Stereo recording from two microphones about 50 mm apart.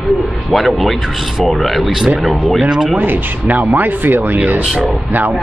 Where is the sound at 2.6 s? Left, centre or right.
Centre.